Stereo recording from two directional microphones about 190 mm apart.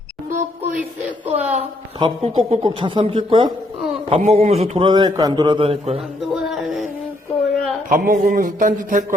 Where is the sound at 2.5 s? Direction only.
25° right (ahead or behind).